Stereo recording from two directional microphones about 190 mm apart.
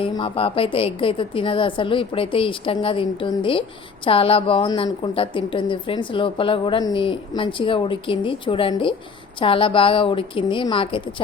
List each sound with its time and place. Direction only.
0.0 s a woman's voice: 30° left (ahead or behind)